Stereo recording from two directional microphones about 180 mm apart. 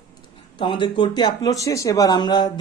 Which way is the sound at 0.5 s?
25° left (ahead or behind).